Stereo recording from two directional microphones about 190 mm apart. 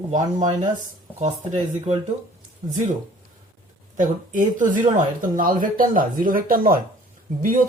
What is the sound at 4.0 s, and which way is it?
Speech, 40° right (ahead or behind).